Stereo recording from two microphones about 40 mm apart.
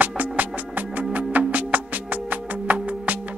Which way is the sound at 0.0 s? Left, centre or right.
Right.